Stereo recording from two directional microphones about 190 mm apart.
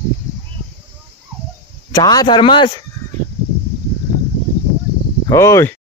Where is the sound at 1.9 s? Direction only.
20° left (ahead or behind).